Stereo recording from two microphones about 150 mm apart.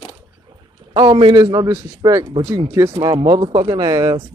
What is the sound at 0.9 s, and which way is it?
Speech, 35° right (ahead or behind).